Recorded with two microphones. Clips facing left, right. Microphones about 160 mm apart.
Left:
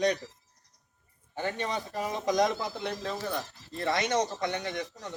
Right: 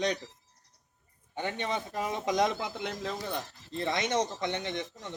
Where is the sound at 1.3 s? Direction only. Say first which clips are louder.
Left 1 dB; 20° right (ahead or behind).